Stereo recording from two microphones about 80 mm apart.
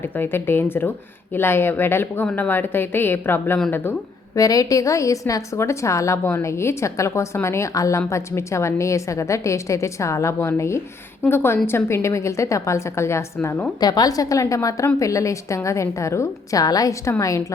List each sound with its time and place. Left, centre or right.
0.2 s a woman's voice: left
4.4 s a woman's voice: left
13.7 s a woman's voice: left